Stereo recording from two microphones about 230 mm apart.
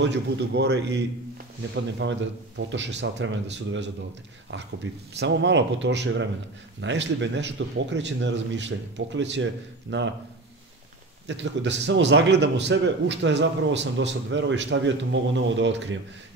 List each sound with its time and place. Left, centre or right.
0.0 s a man's voice: right
5.2 s a man's voice: right
11.2 s a man's voice: right